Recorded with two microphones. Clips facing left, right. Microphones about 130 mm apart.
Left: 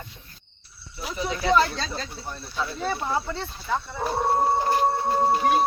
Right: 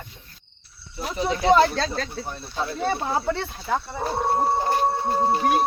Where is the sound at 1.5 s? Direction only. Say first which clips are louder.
Right 1 dB; 60° right (ahead or behind).